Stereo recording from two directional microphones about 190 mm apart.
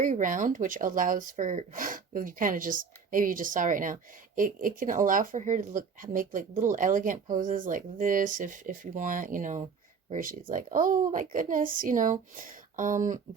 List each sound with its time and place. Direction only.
0.0 s speech: 40° right (ahead or behind)